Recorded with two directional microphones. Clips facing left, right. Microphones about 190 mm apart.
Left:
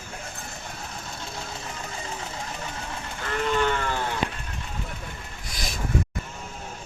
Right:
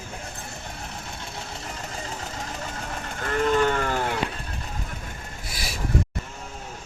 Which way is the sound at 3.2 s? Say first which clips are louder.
Right 3 dB; 45° right (ahead or behind).